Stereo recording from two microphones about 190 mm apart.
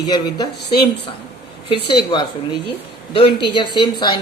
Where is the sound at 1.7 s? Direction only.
25° left (ahead or behind).